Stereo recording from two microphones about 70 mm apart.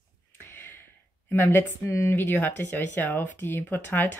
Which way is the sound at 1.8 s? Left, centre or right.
Left.